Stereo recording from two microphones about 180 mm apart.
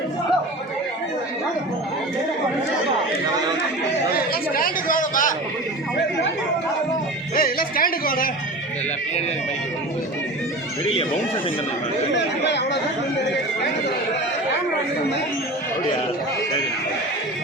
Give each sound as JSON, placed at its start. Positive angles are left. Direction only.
{"t": 4.1, "sound": "chatter", "side_deg": 55}
{"t": 7.3, "sound": "music", "side_deg": 50}
{"t": 12.1, "sound": "speech", "side_deg": 75}